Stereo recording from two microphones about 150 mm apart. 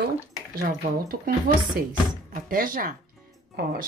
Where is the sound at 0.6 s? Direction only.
75° right (ahead or behind).